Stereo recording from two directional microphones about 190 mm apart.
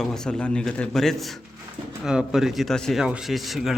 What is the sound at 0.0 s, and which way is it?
Speech, 5° left (ahead or behind).